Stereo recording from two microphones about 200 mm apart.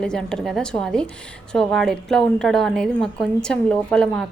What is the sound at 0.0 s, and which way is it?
A woman's voice, 5° left (ahead or behind).